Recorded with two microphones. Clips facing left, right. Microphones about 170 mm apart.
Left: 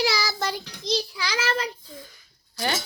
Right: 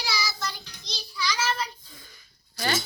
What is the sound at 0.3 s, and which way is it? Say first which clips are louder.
Child singing: left 6 dB; 90° left.